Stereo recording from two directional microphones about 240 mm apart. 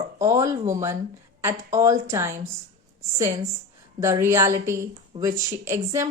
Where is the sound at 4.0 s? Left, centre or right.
Centre.